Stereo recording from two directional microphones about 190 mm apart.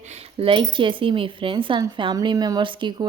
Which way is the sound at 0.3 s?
25° right (ahead or behind).